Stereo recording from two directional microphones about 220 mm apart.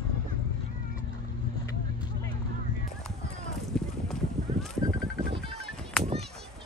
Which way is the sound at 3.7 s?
5° left (ahead or behind).